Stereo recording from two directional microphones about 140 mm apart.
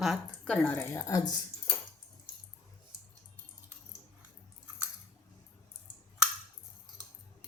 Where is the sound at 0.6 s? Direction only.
15° left (ahead or behind).